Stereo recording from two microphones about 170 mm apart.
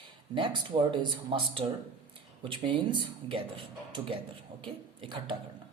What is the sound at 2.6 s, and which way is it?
Speech, 30° right (ahead or behind).